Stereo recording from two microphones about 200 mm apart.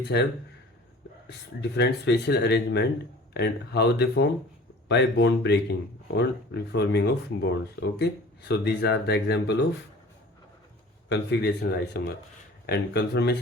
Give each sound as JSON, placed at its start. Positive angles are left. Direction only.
{"t": 0.0, "sound": "speech", "side_deg": 55}
{"t": 1.7, "sound": "speech", "side_deg": 55}
{"t": 11.1, "sound": "speech", "side_deg": 55}